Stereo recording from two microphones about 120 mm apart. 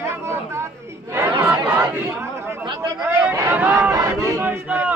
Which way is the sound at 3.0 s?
15° right (ahead or behind).